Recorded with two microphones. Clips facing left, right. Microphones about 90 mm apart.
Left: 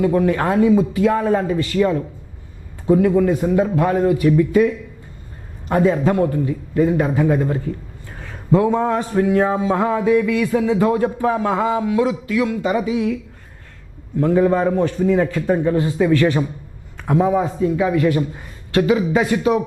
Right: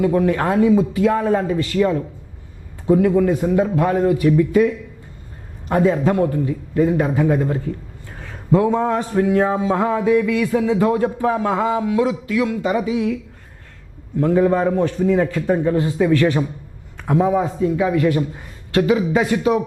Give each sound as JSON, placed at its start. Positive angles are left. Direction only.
{"t": 0.0, "sound": "speech", "side_deg": 20}
{"t": 14.2, "sound": "speech", "side_deg": 15}